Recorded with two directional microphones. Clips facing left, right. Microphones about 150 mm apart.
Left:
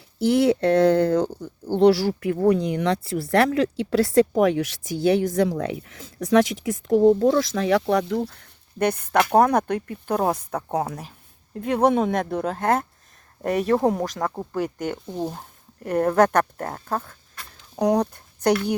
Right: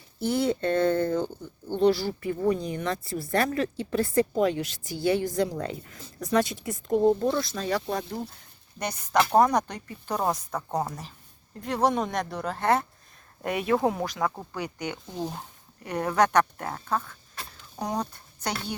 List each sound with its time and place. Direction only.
0.2 s speech: 80° left; by 17.2 s 45° left (ahead or behind)
17.7 s speech: 65° left (ahead or behind)